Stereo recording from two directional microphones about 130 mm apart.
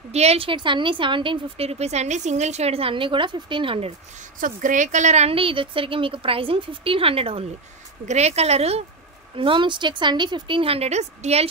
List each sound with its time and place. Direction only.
0.1 s a woman's voice: 55° right (ahead or behind)
4.4 s a woman's voice: 85° right; by 8.8 s 55° right (ahead or behind)
9.4 s a woman's voice: 40° right (ahead or behind); by 11.4 s 55° right (ahead or behind)